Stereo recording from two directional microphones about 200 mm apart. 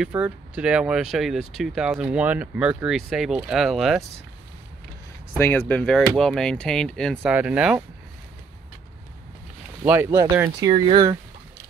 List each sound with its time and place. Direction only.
0.0 s speech: 5° right (ahead or behind)
5.3 s speech: 10° left (ahead or behind)
9.8 s speech: 10° right (ahead or behind)
10.7 s speech: 25° right (ahead or behind)